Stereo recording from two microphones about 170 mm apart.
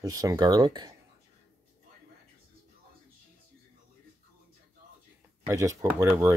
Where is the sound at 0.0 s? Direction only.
20° right (ahead or behind).